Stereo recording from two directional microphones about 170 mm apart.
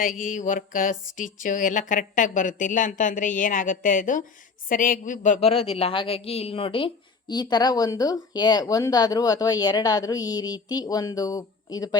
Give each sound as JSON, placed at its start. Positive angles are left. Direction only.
{"t": 0.0, "sound": "a woman's voice", "side_deg": 50}